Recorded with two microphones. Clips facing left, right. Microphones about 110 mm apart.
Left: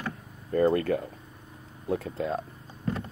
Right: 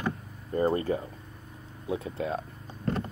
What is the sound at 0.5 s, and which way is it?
Speech, 65° left (ahead or behind).